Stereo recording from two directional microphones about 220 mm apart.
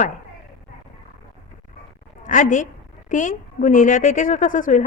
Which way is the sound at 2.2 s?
35° left (ahead or behind).